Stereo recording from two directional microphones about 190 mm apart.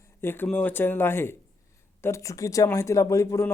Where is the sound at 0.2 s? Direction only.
10° left (ahead or behind).